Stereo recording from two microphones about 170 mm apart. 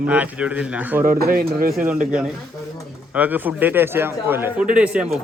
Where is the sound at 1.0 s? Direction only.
60° right (ahead or behind).